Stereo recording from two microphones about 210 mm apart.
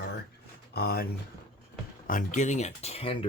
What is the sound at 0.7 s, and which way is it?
Speech, 50° left (ahead or behind).